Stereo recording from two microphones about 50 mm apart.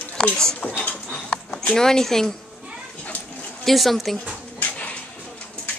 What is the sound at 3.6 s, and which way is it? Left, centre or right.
Speech, centre.